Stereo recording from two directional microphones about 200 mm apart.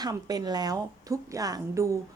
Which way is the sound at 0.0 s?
20° right (ahead or behind).